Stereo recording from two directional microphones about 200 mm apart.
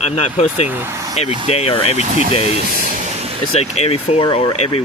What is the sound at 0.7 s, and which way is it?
Speech, 10° right (ahead or behind).